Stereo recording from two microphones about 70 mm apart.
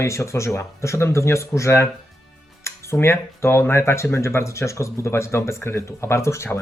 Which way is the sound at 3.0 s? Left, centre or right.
Left.